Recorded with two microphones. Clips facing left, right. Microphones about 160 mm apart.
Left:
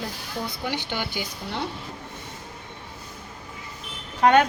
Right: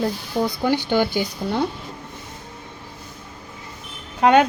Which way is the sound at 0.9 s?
45° right (ahead or behind).